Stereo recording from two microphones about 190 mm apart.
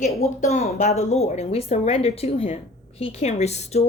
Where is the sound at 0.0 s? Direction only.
35° left (ahead or behind).